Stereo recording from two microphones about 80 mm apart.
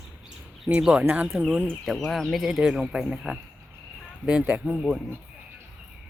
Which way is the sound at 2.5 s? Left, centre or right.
Centre.